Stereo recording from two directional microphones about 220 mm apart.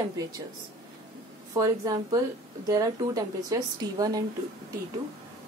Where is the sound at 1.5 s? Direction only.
15° right (ahead or behind).